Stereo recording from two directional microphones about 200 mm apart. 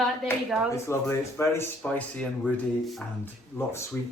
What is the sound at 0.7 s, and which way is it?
Speech, 15° left (ahead or behind).